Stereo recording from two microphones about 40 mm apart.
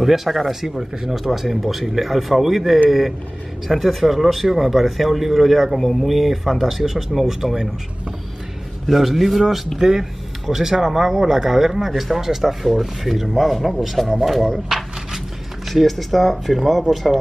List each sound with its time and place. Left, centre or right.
0.0 s a man's voice: centre
8.8 s a man's voice: centre
9.8 s a man's voice: centre
15.7 s a man's voice: centre